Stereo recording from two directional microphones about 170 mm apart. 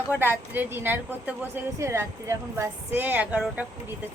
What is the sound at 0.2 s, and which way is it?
A woman's voice, 10° right (ahead or behind).